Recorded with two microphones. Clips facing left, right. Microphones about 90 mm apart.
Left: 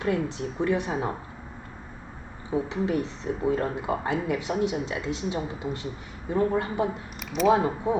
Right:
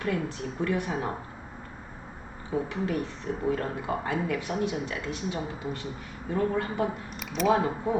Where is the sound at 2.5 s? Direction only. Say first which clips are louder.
Left 3 dB; 20° left (ahead or behind).